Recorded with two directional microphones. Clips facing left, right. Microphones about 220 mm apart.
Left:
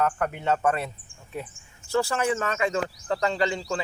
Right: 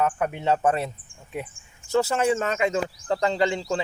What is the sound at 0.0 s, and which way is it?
Speech, 10° right (ahead or behind).